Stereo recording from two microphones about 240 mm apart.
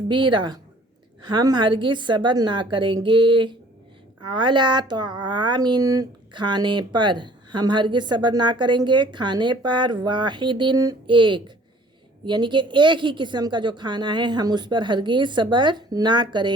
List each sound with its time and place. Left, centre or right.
0.1 s speech: centre